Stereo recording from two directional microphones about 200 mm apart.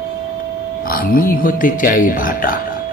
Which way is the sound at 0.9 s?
45° left (ahead or behind).